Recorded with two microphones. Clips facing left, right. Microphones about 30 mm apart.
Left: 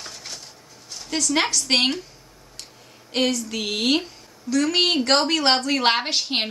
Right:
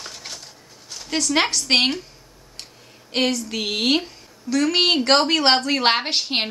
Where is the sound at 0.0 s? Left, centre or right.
Centre.